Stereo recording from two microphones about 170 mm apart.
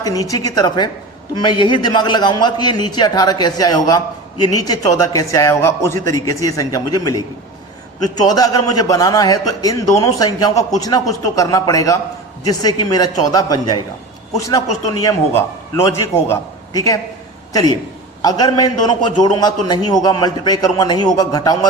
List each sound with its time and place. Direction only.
0.0 s a man's voice: 20° left (ahead or behind)